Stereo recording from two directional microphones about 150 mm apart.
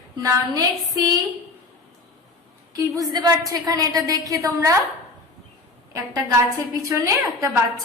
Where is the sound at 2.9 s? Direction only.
25° right (ahead or behind).